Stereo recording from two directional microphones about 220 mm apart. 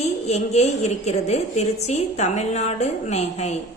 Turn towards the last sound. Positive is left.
turn(degrees=30)  # may be behind; listen again after turning